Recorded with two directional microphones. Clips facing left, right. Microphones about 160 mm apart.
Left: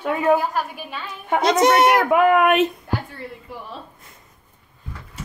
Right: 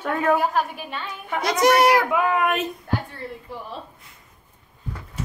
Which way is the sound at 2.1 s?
65° left (ahead or behind).